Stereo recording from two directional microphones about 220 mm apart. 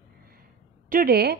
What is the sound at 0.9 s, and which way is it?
Speech, 40° right (ahead or behind).